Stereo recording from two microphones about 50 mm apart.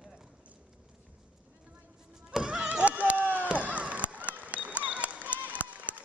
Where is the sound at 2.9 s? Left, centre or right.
Right.